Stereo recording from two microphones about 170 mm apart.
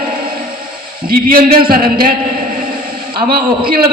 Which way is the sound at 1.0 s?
60° right (ahead or behind).